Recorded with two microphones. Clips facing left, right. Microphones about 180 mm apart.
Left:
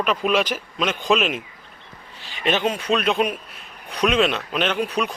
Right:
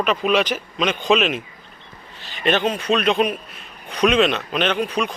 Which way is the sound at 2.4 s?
10° left (ahead or behind).